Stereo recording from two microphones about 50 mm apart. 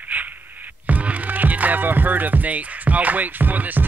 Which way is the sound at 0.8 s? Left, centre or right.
Right.